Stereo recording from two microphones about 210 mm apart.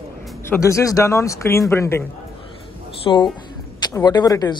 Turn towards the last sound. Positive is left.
turn(degrees=20)  # may be behind; listen again after turning